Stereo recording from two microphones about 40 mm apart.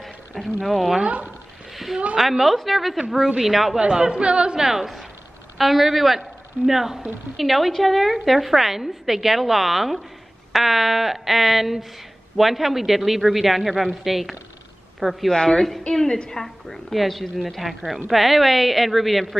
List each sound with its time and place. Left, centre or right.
0.0 s speech: centre
1.7 s a sound: centre
2.1 s a woman's voice: centre
3.8 s speech: right
4.6 s a woman's voice: centre
15.2 s a woman's voice: centre